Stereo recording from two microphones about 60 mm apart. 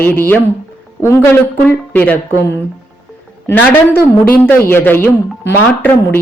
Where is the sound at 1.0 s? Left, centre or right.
Left.